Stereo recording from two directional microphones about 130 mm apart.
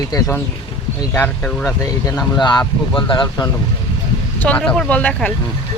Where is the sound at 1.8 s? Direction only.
25° left (ahead or behind).